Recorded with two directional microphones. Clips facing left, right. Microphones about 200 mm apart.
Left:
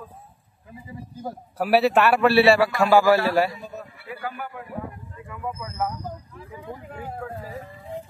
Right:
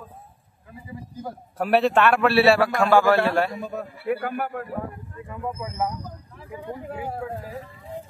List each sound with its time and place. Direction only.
1.6 s a man's voice: 5° left (ahead or behind)
3.5 s speech: 55° right (ahead or behind)
5.3 s speech: 25° right (ahead or behind)